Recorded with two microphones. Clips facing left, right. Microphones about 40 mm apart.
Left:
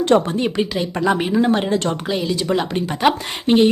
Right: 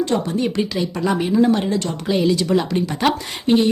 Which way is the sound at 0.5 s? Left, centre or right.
Left.